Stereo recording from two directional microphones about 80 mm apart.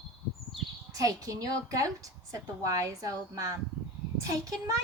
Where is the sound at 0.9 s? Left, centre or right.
Right.